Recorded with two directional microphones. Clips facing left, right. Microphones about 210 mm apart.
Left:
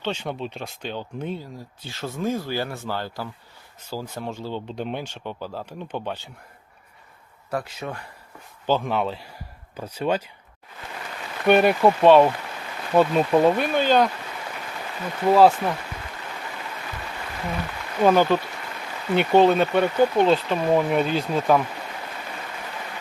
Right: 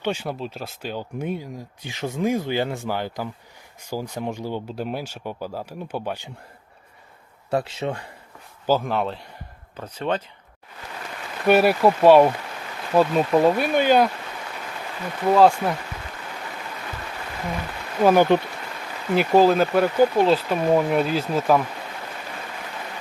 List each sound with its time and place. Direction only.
0.0 s speech: 10° right (ahead or behind)
7.5 s speech: 25° right (ahead or behind)
8.6 s speech: 5° right (ahead or behind)
11.4 s speech: 5° right (ahead or behind)
15.3 s speech: centre (ahead or behind)
18.0 s speech: 15° right (ahead or behind)
19.1 s speech: centre (ahead or behind)